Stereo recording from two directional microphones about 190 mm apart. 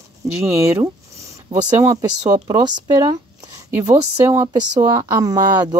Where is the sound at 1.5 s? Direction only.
15° right (ahead or behind).